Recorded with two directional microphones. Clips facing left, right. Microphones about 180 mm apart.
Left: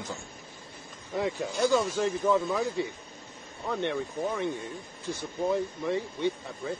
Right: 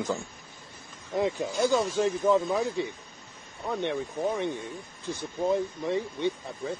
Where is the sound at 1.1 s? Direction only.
20° right (ahead or behind).